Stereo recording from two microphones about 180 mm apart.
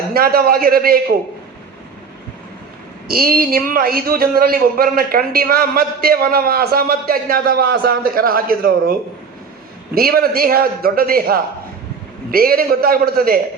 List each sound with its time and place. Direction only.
0.1 s a man's voice: 55° right (ahead or behind)
3.1 s a man's voice: 55° right (ahead or behind)